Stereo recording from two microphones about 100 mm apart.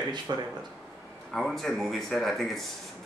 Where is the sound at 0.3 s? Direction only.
45° right (ahead or behind).